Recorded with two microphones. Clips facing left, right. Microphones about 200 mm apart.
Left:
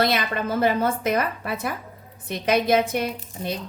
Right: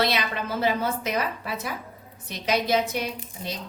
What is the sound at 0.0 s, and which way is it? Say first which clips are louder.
A woman's voice: left 3 dB; 50° left (ahead or behind).